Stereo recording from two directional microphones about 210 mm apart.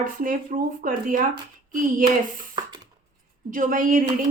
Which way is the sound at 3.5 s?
40° right (ahead or behind).